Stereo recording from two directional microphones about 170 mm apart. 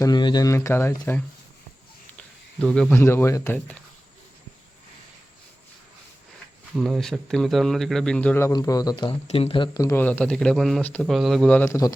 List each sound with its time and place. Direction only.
0.0 s a man's voice: 25° left (ahead or behind)
6.7 s speech: centre (ahead or behind); by 9.1 s 25° left (ahead or behind)
9.2 s speech: 35° left (ahead or behind); by 11.9 s 20° left (ahead or behind)